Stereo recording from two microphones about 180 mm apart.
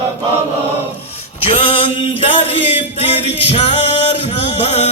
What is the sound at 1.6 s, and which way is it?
Male singing, 30° left (ahead or behind).